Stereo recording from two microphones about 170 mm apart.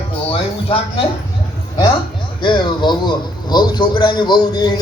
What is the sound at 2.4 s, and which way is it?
A man's voice, 30° left (ahead or behind).